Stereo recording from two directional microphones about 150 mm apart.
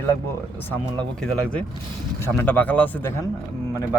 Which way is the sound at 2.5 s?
10° left (ahead or behind).